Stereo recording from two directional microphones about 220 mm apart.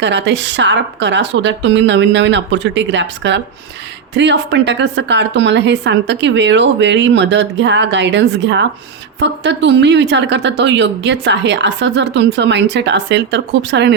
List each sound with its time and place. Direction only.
0.0 s a woman's voice: 55° right (ahead or behind)